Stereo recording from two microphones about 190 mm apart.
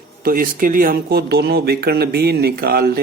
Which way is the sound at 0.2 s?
50° right (ahead or behind).